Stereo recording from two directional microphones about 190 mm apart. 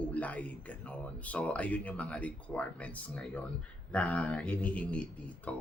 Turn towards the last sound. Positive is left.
turn(degrees=5)  # may be behind; listen again after turning